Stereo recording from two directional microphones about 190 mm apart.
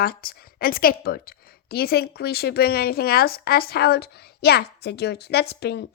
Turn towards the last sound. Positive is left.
turn(degrees=60)  # may be behind; listen again after turning